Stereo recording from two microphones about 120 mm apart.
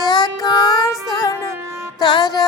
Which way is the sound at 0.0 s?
35° left (ahead or behind).